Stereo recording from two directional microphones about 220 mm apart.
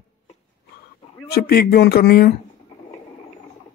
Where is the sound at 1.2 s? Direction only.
45° left (ahead or behind).